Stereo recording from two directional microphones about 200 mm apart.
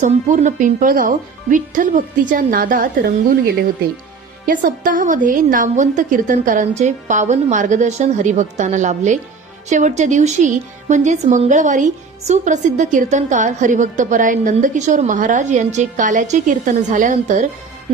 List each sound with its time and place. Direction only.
0.0 s a woman's voice: 40° right (ahead or behind)